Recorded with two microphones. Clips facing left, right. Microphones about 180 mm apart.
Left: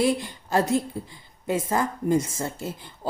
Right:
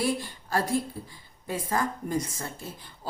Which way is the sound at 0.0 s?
20° left (ahead or behind).